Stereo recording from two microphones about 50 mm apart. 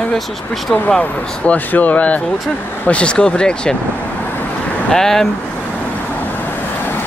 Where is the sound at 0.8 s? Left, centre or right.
Left.